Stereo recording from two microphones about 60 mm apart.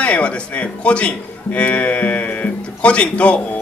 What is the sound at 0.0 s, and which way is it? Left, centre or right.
Speech, centre.